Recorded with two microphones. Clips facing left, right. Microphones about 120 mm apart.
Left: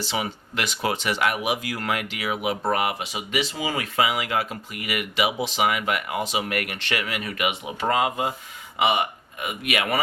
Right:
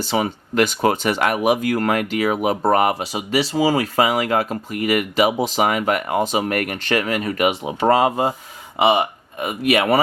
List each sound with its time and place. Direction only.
0.0 s speech: 45° right (ahead or behind)